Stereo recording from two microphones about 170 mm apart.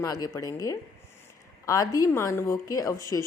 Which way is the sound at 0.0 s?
20° left (ahead or behind).